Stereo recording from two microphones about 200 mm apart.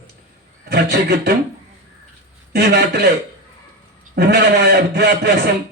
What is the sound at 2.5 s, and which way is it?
Speech, 55° right (ahead or behind).